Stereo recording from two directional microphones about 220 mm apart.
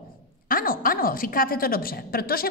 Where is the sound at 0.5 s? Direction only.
40° left (ahead or behind).